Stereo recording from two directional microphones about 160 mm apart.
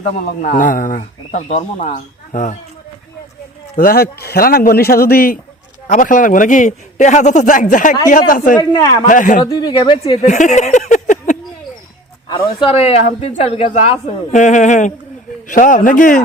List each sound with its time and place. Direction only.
0.4 s speech: 55° left (ahead or behind)
3.8 s speech: 70° left (ahead or behind)
5.9 s speech: 55° left (ahead or behind)
8.5 s speech: 25° left (ahead or behind)
9.0 s speech: 55° left (ahead or behind)
9.4 s speech: 30° left (ahead or behind)
10.2 s speech: 50° left (ahead or behind)
12.3 s speech: 30° left (ahead or behind); by 16.2 s 55° left (ahead or behind)